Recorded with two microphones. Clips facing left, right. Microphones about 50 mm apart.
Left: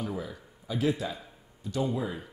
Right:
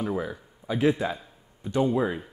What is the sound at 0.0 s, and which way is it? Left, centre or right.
Speech, right.